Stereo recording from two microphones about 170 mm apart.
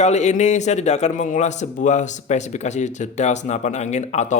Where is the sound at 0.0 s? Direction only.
40° left (ahead or behind).